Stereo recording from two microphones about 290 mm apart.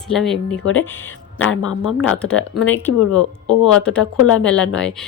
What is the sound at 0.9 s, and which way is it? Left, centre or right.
Speech, centre.